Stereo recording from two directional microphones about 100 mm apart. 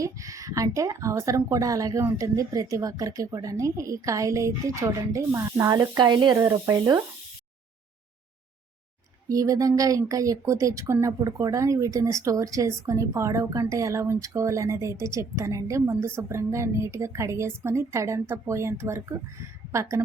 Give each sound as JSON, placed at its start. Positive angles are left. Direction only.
{"t": 0.0, "sound": "speech", "side_deg": -35}
{"t": 6.0, "sound": "speech", "side_deg": -50}
{"t": 6.3, "sound": "speech", "side_deg": -25}
{"t": 6.7, "sound": "speech", "side_deg": -40}
{"t": 9.3, "sound": "speech", "side_deg": -35}